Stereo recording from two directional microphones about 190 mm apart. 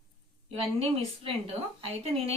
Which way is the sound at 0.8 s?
30° right (ahead or behind).